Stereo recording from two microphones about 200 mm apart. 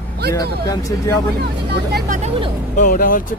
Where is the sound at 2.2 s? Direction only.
30° right (ahead or behind).